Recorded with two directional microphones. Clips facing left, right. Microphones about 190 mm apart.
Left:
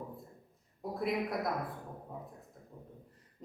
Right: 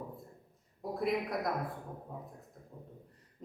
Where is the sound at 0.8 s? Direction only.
Centre (ahead or behind).